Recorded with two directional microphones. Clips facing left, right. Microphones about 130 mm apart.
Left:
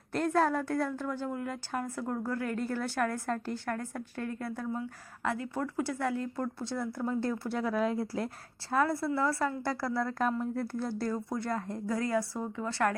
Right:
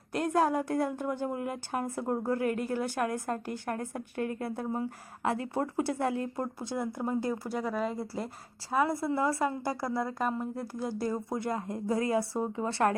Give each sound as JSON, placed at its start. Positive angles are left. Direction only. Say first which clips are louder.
{"t": 0.1, "sound": "a woman's voice", "louder": "right 1 dB", "side_deg": -10}
{"t": 8.7, "sound": "a woman's voice", "louder": "right 1 dB", "side_deg": -15}